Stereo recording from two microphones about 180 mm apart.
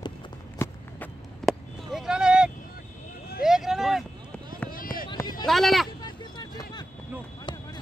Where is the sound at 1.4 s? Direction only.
Centre (ahead or behind).